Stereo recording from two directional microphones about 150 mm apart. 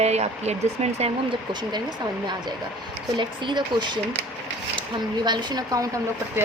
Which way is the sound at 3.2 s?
30° right (ahead or behind).